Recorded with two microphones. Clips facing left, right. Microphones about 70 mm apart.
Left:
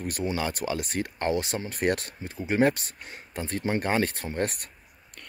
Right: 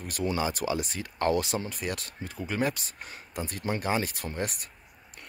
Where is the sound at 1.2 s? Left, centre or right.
Left.